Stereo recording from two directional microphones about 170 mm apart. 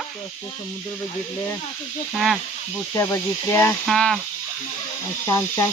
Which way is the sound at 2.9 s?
15° left (ahead or behind).